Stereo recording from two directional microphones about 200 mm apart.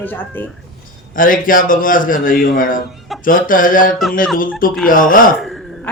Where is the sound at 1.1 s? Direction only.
45° left (ahead or behind).